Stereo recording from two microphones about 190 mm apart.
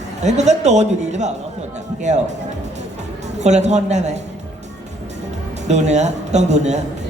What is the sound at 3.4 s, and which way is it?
Speech, 35° right (ahead or behind).